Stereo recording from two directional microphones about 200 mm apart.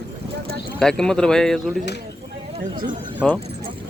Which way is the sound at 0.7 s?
5° left (ahead or behind).